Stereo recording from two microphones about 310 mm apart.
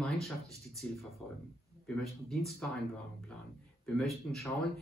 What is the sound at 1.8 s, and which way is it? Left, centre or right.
Speech, centre.